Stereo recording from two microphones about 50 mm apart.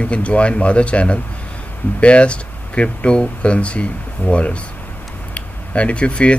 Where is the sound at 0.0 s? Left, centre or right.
Left.